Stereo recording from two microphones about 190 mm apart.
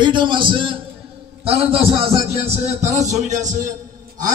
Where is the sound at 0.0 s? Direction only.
25° right (ahead or behind).